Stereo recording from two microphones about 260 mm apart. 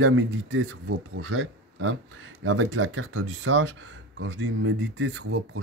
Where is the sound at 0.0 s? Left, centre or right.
Right.